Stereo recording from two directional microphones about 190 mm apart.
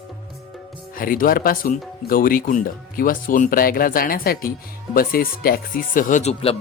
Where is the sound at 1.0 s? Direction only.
50° left (ahead or behind).